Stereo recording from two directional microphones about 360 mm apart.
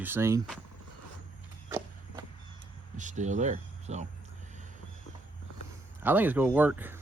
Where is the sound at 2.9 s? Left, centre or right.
Centre.